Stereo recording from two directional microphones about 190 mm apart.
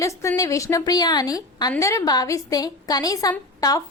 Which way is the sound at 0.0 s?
15° left (ahead or behind).